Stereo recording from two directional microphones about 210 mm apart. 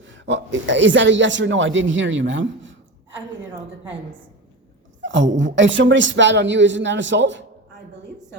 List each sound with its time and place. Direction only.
0.0 s a man's voice: 60° right (ahead or behind)
5.0 s a man's voice: 60° right (ahead or behind)